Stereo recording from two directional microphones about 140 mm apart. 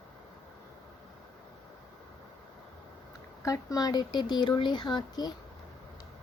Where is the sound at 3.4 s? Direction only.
25° left (ahead or behind).